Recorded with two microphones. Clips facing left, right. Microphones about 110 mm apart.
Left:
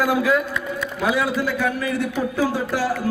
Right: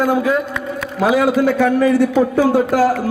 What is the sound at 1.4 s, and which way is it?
A man's voice, 70° right (ahead or behind).